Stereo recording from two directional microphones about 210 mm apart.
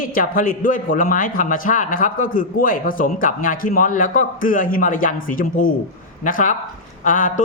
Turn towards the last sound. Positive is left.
turn(degrees=40)  # may be behind; listen again after turning